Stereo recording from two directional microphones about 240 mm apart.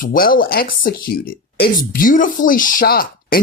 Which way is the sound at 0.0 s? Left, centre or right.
Left.